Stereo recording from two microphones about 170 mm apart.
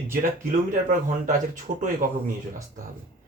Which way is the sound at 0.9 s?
50° right (ahead or behind).